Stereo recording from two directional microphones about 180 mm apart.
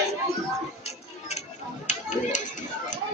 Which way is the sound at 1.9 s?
45° left (ahead or behind).